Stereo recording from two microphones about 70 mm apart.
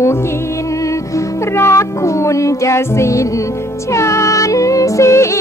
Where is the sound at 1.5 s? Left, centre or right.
Left.